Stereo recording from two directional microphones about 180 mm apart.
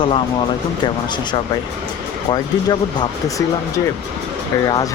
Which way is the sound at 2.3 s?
20° left (ahead or behind).